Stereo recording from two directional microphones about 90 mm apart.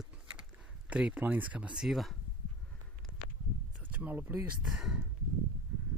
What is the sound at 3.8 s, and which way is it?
Speech, 20° right (ahead or behind).